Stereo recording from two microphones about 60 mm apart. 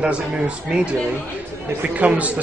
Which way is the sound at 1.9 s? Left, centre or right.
Right.